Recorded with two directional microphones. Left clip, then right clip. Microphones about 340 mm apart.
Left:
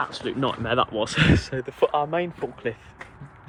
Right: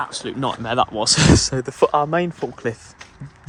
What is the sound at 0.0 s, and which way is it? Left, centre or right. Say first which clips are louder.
Speech: right 2 dB; centre.